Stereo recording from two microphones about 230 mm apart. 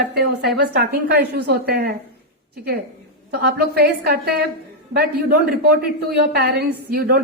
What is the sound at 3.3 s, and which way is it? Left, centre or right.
A woman's voice, right.